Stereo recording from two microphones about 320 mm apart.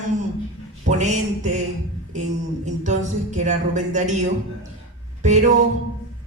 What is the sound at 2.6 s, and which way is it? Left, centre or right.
A woman's voice, right.